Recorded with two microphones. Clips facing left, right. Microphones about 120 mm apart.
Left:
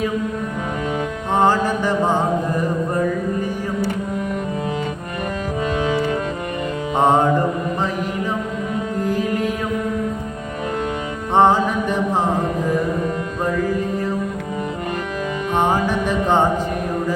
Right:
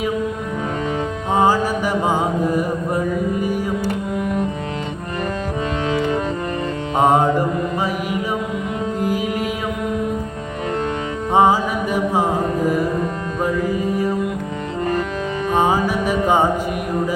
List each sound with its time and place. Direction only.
1.3 s mantra: 10° right (ahead or behind)
6.9 s music: 10° right (ahead or behind)
9.0 s music: 10° right (ahead or behind)
11.3 s mantra: 5° right (ahead or behind)
13.4 s music: 10° right (ahead or behind)
15.5 s music: 10° right (ahead or behind)